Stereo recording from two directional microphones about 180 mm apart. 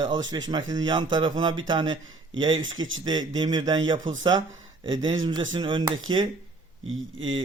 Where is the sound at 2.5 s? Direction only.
90° right.